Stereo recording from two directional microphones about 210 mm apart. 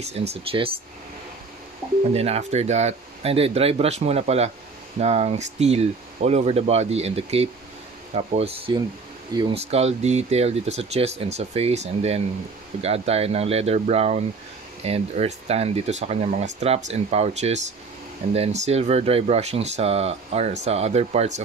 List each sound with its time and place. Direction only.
0.3 s speech: 25° right (ahead or behind)
2.1 s speech: 30° right (ahead or behind)